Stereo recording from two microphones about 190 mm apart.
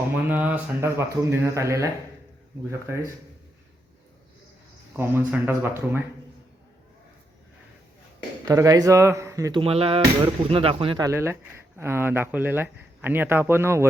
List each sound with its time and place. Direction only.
0.3 s speech: 10° right (ahead or behind)
4.9 s speech: 10° right (ahead or behind)
8.4 s speech: 15° right (ahead or behind)